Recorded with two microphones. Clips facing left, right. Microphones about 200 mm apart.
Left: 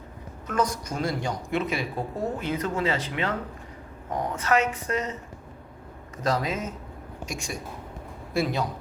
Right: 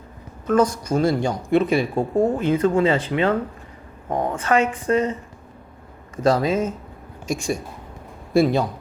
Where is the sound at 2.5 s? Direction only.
30° right (ahead or behind).